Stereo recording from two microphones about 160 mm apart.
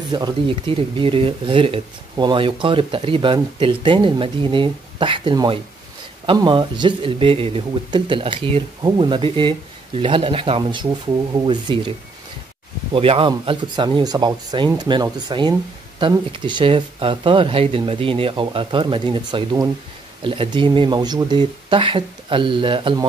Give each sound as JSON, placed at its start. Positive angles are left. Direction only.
{"t": 0.1, "sound": "speech", "side_deg": -30}
{"t": 12.9, "sound": "speech", "side_deg": -35}